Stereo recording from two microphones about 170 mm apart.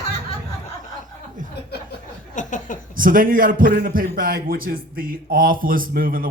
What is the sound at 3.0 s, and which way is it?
A man's voice, 55° right (ahead or behind).